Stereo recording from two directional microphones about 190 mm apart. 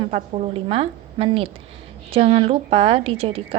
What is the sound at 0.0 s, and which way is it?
A woman's voice, 35° right (ahead or behind).